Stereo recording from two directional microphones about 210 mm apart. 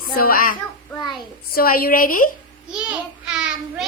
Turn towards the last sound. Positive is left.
turn(degrees=-5)  # may be behind; listen again after turning